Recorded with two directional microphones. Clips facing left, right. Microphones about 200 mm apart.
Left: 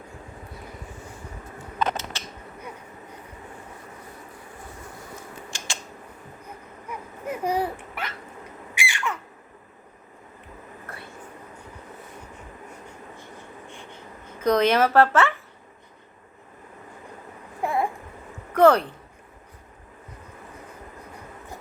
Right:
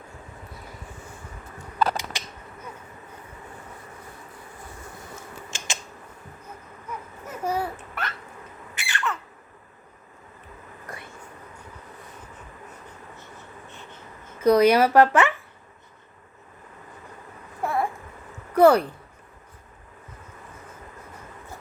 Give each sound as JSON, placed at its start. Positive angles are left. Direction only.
{"t": 2.1, "sound": "scissors", "side_deg": -15}
{"t": 5.5, "sound": "a sound", "side_deg": -20}
{"t": 6.8, "sound": "babbling", "side_deg": 15}
{"t": 8.7, "sound": "squawk", "side_deg": 10}
{"t": 10.8, "sound": "vehicle", "side_deg": -15}
{"t": 13.7, "sound": "a sound", "side_deg": 15}
{"t": 14.4, "sound": "speech", "side_deg": -10}
{"t": 17.6, "sound": "babbling", "side_deg": 15}
{"t": 18.5, "sound": "a sound", "side_deg": -10}